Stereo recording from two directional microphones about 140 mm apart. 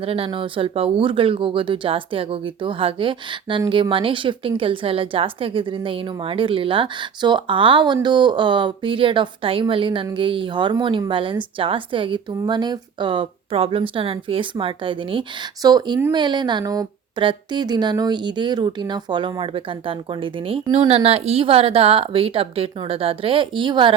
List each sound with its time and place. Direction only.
0.0 s a woman's voice: 40° right (ahead or behind)